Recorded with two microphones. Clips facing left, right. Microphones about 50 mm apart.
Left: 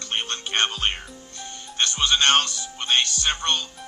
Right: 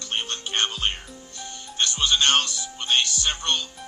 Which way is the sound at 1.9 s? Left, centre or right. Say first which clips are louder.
Left 2 dB; centre.